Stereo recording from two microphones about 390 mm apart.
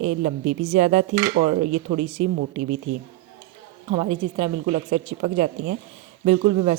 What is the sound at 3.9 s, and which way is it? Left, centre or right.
A woman's voice, centre.